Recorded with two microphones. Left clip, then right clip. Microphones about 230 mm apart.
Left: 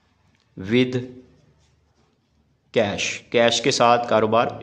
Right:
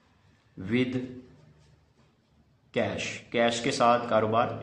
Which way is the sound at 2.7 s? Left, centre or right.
Left.